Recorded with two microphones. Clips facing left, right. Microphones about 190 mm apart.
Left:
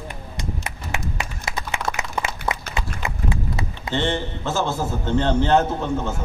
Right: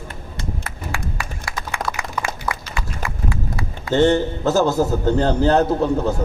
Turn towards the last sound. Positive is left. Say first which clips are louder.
# right 6 dB
turn(degrees=-40)  # may be behind; listen again after turning